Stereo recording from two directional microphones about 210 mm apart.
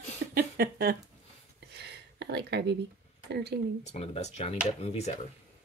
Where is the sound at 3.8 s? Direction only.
30° left (ahead or behind).